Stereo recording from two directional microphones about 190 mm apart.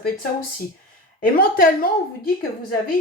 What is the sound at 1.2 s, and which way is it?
Speech, 50° left (ahead or behind).